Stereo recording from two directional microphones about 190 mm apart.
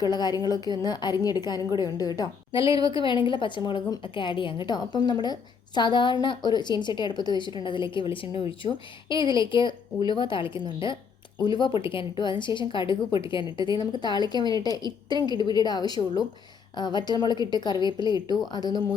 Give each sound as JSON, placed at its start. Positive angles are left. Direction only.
{"t": 0.1, "sound": "a woman's voice", "side_deg": 20}